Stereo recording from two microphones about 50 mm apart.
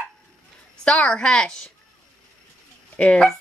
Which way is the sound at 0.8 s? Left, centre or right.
Left.